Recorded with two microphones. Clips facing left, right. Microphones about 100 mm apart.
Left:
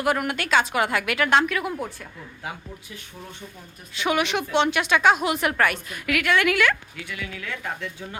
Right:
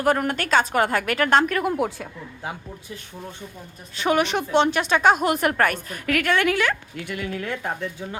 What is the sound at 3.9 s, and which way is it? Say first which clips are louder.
Speech: right 2 dB; 40° right (ahead or behind).